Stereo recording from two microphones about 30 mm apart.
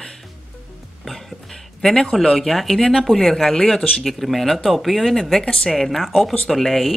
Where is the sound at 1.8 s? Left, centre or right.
Centre.